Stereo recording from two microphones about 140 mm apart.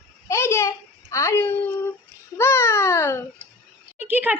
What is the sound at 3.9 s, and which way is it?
Speech, 10° right (ahead or behind).